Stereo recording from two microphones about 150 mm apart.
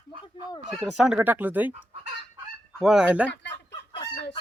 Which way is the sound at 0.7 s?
Centre (ahead or behind).